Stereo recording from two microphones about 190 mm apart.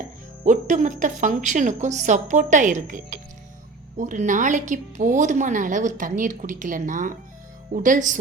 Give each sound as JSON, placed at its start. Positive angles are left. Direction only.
{"t": 0.4, "sound": "a woman's voice", "side_deg": -40}